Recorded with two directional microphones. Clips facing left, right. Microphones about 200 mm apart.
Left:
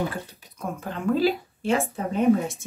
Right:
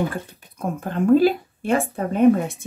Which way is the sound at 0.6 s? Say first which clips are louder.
Right 7 dB; 50° right (ahead or behind).